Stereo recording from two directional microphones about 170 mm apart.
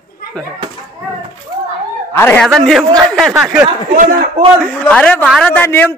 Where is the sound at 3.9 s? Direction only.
55° right (ahead or behind).